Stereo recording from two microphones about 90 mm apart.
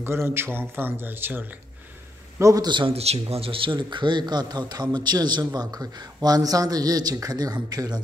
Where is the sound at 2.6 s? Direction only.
60° right (ahead or behind).